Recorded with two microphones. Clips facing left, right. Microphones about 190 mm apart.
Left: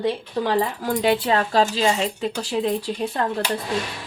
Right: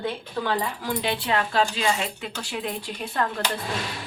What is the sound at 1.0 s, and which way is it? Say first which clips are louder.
Speech: left 7 dB; 40° left (ahead or behind).